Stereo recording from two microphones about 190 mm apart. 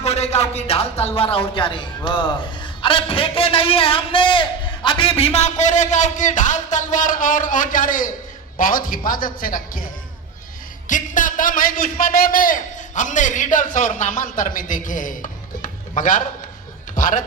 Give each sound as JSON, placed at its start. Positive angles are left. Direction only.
{"t": 0.0, "sound": "a man's voice", "side_deg": 35}
{"t": 10.8, "sound": "a man's voice", "side_deg": 40}
{"t": 16.9, "sound": "a sound", "side_deg": 45}